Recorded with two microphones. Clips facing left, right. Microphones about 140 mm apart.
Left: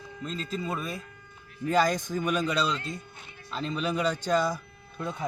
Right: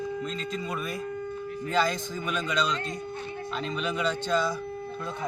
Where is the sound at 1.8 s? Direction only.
45° left (ahead or behind).